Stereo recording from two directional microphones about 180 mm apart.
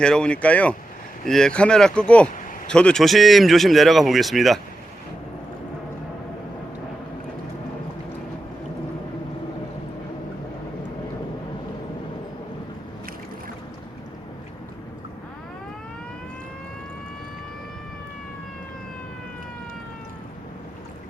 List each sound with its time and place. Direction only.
0.0 s speech: 5° left (ahead or behind)